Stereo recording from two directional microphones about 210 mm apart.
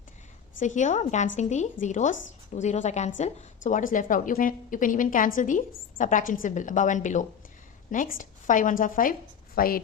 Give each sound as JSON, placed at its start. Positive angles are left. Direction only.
{"t": 0.6, "sound": "a woman's voice", "side_deg": 35}